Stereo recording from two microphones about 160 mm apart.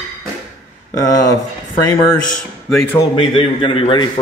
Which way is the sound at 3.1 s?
35° left (ahead or behind).